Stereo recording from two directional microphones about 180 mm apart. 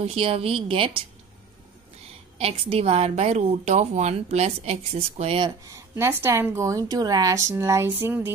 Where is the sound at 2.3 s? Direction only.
30° right (ahead or behind).